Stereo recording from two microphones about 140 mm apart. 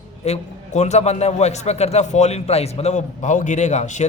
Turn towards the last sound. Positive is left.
turn(degrees=55)  # may be behind; listen again after turning